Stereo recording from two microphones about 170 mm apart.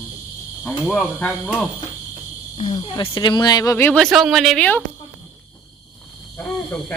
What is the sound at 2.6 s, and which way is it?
Speech, 30° left (ahead or behind).